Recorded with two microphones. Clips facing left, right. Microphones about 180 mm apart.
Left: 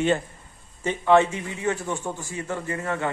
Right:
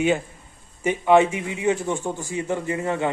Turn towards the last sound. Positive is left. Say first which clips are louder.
# right 4 dB
turn(degrees=-20)  # may be behind; listen again after turning